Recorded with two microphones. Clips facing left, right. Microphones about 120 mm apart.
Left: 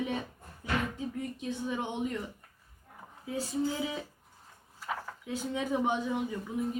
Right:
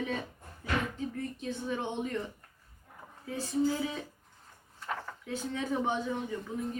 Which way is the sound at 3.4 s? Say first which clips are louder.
Right 2 dB; 20° left (ahead or behind).